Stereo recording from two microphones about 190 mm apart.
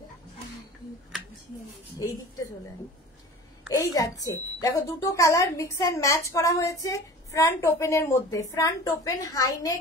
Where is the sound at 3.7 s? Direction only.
15° left (ahead or behind).